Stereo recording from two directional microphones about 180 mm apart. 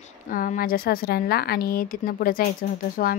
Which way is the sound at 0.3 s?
50° left (ahead or behind).